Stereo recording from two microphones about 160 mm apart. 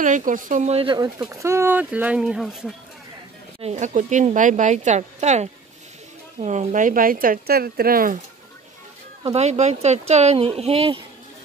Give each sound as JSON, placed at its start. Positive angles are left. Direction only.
{"t": 0.0, "sound": "a woman's voice", "side_deg": -55}
{"t": 0.8, "sound": "speech", "side_deg": -25}
{"t": 3.6, "sound": "a woman's voice", "side_deg": -45}
{"t": 9.2, "sound": "speech", "side_deg": -40}